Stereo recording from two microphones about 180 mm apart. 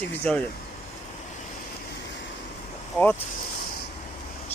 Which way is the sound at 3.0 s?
5° left (ahead or behind).